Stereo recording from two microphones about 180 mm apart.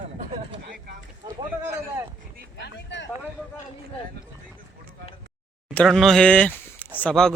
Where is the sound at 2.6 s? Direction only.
75° left (ahead or behind).